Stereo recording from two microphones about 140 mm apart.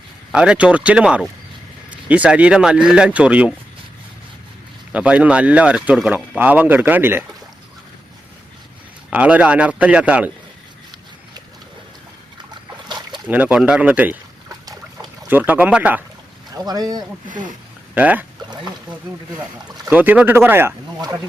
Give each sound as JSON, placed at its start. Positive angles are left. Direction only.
{"t": 0.3, "sound": "speech", "side_deg": -5}
{"t": 4.9, "sound": "speech", "side_deg": -10}
{"t": 9.0, "sound": "speech", "side_deg": -10}
{"t": 12.9, "sound": "boat", "side_deg": -30}
{"t": 13.2, "sound": "speech", "side_deg": -10}
{"t": 15.3, "sound": "speech", "side_deg": -10}
{"t": 16.5, "sound": "speech", "side_deg": -30}
{"t": 17.9, "sound": "speech", "side_deg": -10}
{"t": 18.5, "sound": "speech", "side_deg": -30}
{"t": 19.9, "sound": "speech", "side_deg": -10}